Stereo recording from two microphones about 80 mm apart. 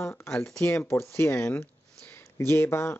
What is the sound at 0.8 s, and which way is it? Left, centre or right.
Speech, left.